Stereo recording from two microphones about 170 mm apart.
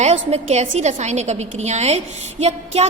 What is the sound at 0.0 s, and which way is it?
A woman's voice, 40° right (ahead or behind).